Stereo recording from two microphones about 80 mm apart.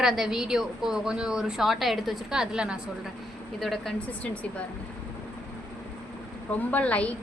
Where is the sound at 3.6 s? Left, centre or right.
Centre.